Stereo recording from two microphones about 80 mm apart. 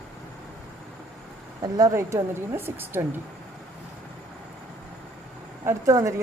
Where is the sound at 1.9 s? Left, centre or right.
Right.